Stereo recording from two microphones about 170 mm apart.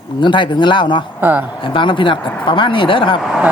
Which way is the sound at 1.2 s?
10° right (ahead or behind).